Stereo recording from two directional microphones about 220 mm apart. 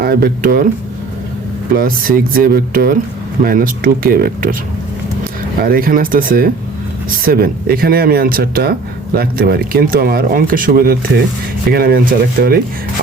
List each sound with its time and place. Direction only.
0.0 s speech: 45° right (ahead or behind)
1.7 s speech: 40° right (ahead or behind)
5.6 s speech: 40° right (ahead or behind)